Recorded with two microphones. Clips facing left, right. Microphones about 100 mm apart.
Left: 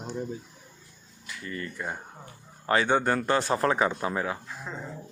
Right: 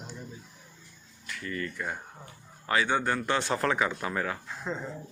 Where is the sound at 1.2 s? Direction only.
25° left (ahead or behind).